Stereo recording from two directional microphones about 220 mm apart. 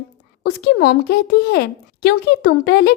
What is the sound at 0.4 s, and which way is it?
Speech, 50° left (ahead or behind).